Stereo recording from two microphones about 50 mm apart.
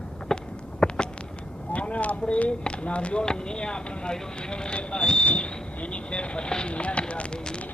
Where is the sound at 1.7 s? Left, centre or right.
Left.